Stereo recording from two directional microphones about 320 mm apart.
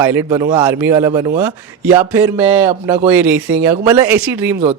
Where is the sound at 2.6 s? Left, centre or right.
Centre.